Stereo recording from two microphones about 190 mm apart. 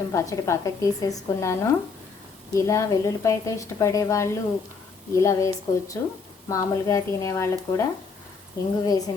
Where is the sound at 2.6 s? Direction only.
15° left (ahead or behind).